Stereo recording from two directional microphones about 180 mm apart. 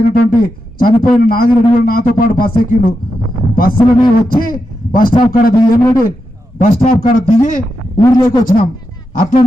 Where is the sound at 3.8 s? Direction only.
25° left (ahead or behind).